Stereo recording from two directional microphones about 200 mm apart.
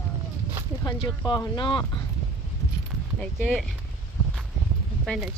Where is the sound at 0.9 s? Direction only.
20° left (ahead or behind).